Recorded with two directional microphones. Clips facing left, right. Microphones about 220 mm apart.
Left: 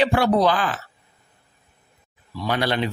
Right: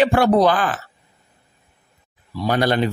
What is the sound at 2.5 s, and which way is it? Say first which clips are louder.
Speech: right 4 dB; 45° right (ahead or behind).